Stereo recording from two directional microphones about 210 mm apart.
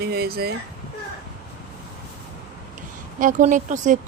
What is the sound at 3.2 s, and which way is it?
Speech, 40° right (ahead or behind).